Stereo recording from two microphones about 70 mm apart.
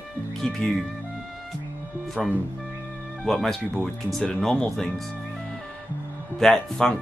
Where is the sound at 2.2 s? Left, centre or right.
Centre.